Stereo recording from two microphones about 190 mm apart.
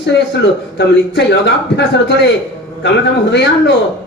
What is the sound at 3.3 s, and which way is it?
Speech, 60° left (ahead or behind).